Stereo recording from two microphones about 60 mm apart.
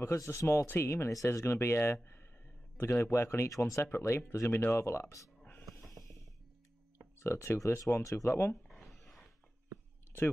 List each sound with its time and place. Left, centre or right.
0.0 s speech: left
0.7 s speech: left
5.8 s music: left
7.2 s speech: left
8.6 s a sound: centre